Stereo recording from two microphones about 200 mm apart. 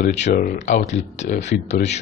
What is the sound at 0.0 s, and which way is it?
Speech, 35° left (ahead or behind).